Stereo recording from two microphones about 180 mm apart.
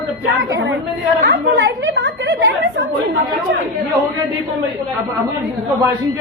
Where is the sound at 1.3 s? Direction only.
80° right.